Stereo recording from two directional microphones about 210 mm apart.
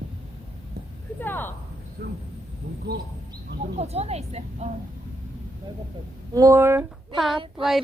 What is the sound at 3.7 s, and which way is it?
Speech, 30° right (ahead or behind).